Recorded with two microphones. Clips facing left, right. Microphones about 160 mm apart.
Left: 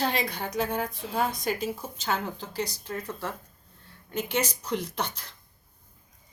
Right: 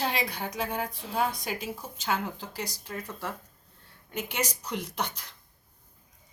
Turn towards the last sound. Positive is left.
turn(degrees=-10)  # may be behind; listen again after turning